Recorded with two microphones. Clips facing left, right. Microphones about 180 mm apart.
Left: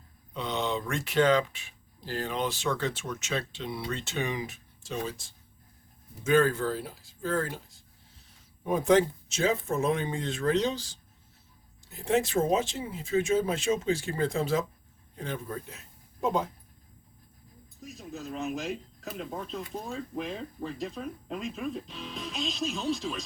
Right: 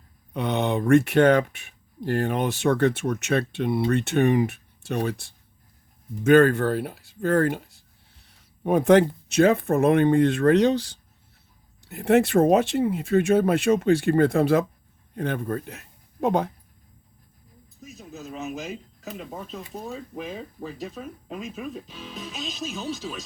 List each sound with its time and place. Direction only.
0.3 s a man's voice: 60° right (ahead or behind)
17.8 s speech: centre (ahead or behind)